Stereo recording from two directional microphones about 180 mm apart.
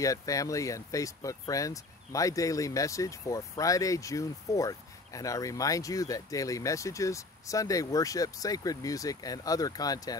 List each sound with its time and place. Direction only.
0.0 s speech: 20° left (ahead or behind)